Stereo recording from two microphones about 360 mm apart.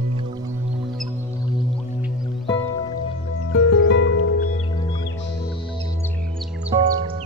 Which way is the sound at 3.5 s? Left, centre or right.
Left.